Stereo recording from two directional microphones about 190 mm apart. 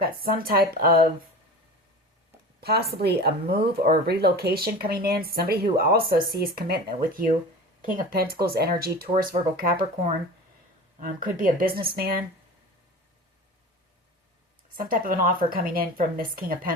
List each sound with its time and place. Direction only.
0.0 s speech: 50° right (ahead or behind)
2.6 s speech: 55° right (ahead or behind)
11.0 s speech: 45° right (ahead or behind)
14.8 s speech: 50° right (ahead or behind)